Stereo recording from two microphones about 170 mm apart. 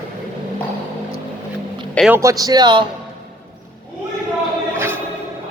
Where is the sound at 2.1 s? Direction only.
20° right (ahead or behind).